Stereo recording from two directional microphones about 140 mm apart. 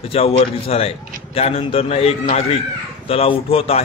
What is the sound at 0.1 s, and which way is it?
A man's voice, 45° left (ahead or behind).